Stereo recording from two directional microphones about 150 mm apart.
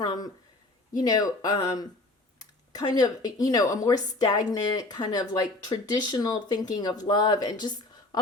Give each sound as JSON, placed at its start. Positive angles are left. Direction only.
{"t": 0.0, "sound": "speech", "side_deg": 25}